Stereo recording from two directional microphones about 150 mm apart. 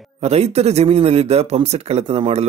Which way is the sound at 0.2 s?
45° right (ahead or behind).